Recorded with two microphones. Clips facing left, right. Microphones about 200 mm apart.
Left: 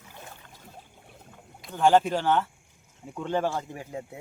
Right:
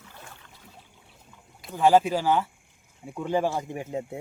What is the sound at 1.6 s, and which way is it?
Speech, 5° right (ahead or behind).